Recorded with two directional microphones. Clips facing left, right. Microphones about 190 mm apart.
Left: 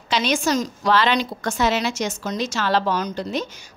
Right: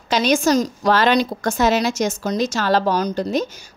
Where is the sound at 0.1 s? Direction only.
40° right (ahead or behind).